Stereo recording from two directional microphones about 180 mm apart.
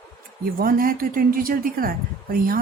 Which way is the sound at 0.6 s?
50° right (ahead or behind).